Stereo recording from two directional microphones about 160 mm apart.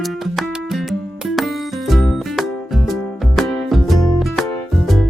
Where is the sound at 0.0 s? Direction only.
Centre (ahead or behind).